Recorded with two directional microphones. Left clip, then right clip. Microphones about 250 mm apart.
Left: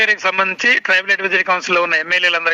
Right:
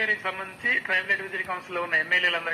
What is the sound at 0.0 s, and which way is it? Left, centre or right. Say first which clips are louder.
A man's voice: left 12 dB; left.